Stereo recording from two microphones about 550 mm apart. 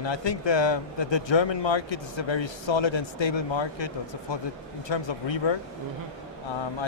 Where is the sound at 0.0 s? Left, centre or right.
Left.